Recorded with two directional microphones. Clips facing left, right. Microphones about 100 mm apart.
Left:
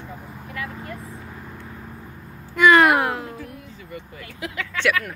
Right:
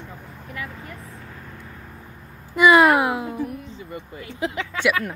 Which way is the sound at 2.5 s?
10° right (ahead or behind).